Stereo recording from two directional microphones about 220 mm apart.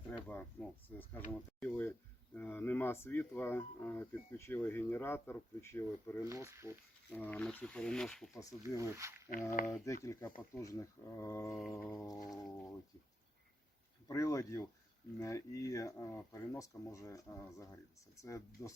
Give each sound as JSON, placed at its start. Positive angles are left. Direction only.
{"t": 0.3, "sound": "speech", "side_deg": 5}
{"t": 6.2, "sound": "speech", "side_deg": -15}
{"t": 7.1, "sound": "speech", "side_deg": 5}
{"t": 8.3, "sound": "speech", "side_deg": 15}
{"t": 8.8, "sound": "speech", "side_deg": -15}
{"t": 9.7, "sound": "speech", "side_deg": 15}
{"t": 11.4, "sound": "speech", "side_deg": 0}
{"t": 11.7, "sound": "speech", "side_deg": 10}
{"t": 14.1, "sound": "speech", "side_deg": 15}